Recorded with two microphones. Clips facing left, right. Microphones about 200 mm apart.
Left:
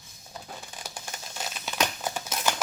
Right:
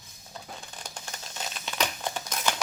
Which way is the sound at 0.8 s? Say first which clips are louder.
Left 1 dB; 10° left (ahead or behind).